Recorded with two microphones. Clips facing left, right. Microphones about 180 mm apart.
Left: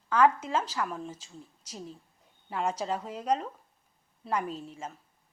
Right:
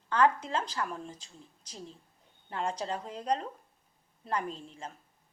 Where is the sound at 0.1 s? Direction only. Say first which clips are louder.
Left 3 dB; 10° left (ahead or behind).